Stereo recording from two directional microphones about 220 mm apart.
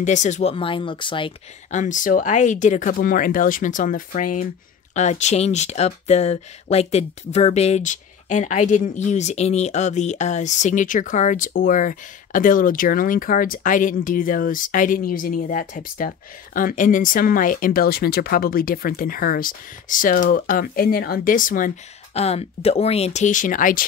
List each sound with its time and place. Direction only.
0.0 s speech: 35° left (ahead or behind)